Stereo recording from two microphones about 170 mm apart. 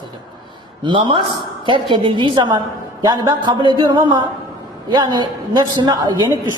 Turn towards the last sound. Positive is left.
turn(degrees=-25)  # may be behind; listen again after turning